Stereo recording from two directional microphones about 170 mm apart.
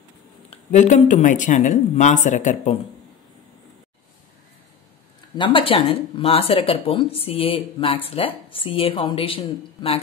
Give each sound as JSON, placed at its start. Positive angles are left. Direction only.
{"t": 0.7, "sound": "speech", "side_deg": 45}
{"t": 5.4, "sound": "speech", "side_deg": 30}